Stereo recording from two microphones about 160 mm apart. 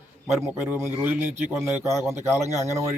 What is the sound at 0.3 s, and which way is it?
A man's voice, 5° right (ahead or behind).